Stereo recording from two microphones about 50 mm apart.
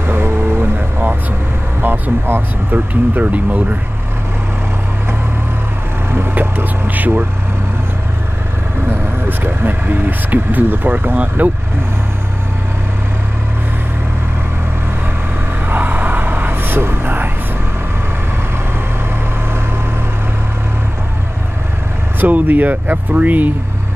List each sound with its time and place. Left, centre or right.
0.0 s vehicle: right
2.7 s speech: right
6.1 s speech: right
8.8 s speech: right
15.7 s vehicle: right
22.2 s speech: right